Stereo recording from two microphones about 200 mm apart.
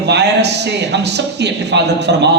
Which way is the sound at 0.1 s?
60° right (ahead or behind).